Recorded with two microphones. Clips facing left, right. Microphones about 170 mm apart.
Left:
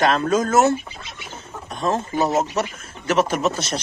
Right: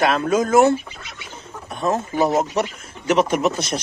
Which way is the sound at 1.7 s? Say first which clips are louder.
Right 1 dB; 10° right (ahead or behind).